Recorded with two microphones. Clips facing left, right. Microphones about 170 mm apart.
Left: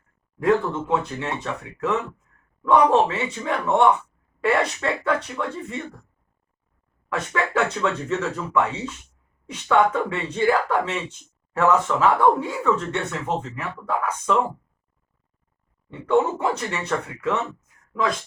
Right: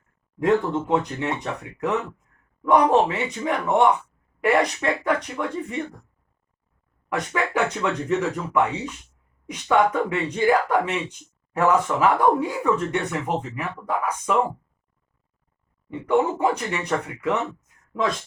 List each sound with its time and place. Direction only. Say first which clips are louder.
0.3 s speech: even; 20° right (ahead or behind)
7.1 s speech: even; 15° right (ahead or behind)
15.9 s speech: left 1 dB; 15° right (ahead or behind)